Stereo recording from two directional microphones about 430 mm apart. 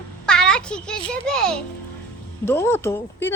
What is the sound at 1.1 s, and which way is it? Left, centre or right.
Speech, centre.